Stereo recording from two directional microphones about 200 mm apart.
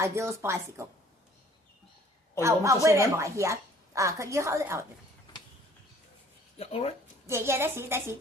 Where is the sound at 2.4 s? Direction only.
15° right (ahead or behind).